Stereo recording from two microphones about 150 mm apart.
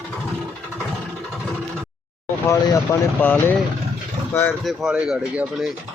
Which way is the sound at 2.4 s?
20° left (ahead or behind).